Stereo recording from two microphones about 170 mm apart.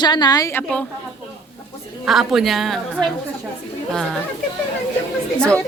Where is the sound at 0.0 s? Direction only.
25° left (ahead or behind); by 0.9 s 10° left (ahead or behind).